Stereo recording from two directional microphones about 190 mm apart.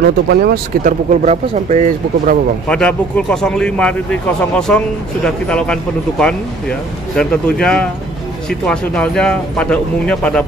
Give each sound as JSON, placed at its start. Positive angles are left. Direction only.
{"t": 0.0, "sound": "speech", "side_deg": -55}
{"t": 1.1, "sound": "speech", "side_deg": -35}
{"t": 2.7, "sound": "speech", "side_deg": 5}